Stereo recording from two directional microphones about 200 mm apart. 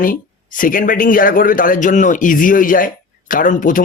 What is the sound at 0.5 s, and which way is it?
Speech, 45° left (ahead or behind).